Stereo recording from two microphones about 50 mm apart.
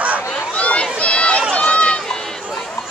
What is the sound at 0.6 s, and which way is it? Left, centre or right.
Run, left.